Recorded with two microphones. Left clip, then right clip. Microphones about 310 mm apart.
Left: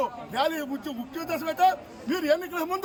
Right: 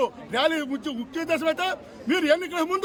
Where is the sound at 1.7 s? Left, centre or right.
Centre.